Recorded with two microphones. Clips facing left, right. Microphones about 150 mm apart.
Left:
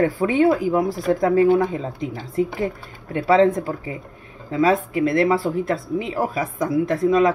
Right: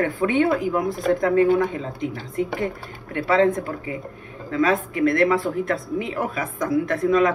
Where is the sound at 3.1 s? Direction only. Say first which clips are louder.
Left 3 dB; 30° left (ahead or behind).